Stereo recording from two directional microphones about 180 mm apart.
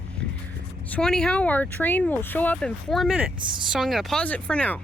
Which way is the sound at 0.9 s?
5° left (ahead or behind).